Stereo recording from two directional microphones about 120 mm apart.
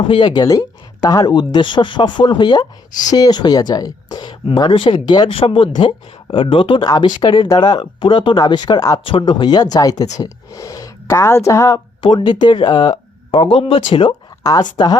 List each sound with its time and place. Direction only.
0.1 s speech: 40° left (ahead or behind)
5.3 s speech: 50° left (ahead or behind); by 9.0 s 35° left (ahead or behind)
9.0 s speech: 45° left (ahead or behind); by 11.8 s 25° left (ahead or behind)
11.9 s speech: 45° left (ahead or behind)
14.4 s speech: 35° left (ahead or behind)